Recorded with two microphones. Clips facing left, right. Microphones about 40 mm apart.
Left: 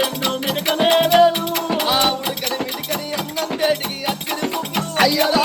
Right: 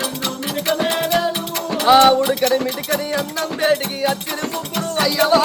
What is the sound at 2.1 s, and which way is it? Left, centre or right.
Music, centre.